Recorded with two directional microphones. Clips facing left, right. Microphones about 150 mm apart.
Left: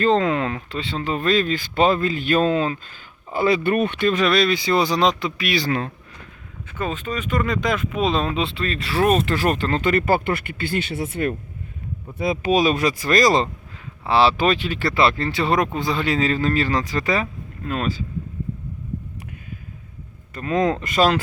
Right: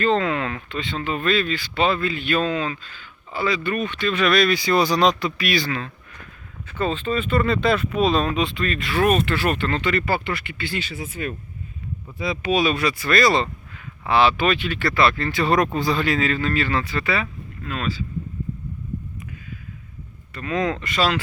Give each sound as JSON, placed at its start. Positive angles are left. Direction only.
{"t": 0.0, "sound": "speech", "side_deg": 35}
{"t": 3.3, "sound": "speech", "side_deg": 55}
{"t": 4.1, "sound": "speech", "side_deg": 30}
{"t": 5.6, "sound": "speech", "side_deg": 50}
{"t": 6.7, "sound": "speech", "side_deg": 10}
{"t": 12.2, "sound": "speech", "side_deg": 45}
{"t": 20.3, "sound": "speech", "side_deg": 45}